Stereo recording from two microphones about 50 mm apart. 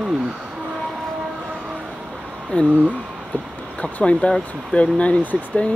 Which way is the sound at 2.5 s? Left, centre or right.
Left.